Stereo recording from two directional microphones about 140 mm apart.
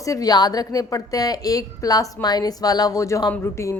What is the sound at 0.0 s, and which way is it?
A woman's voice, 25° left (ahead or behind).